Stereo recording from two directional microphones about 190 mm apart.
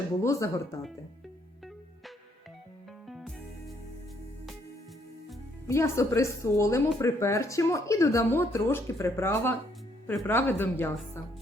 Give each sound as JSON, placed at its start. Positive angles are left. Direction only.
{"t": 0.2, "sound": "speech", "side_deg": 15}
{"t": 3.1, "sound": "music", "side_deg": 0}
{"t": 5.6, "sound": "speech", "side_deg": 15}